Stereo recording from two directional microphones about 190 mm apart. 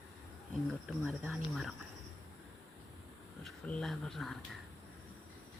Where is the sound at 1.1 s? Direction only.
5° right (ahead or behind).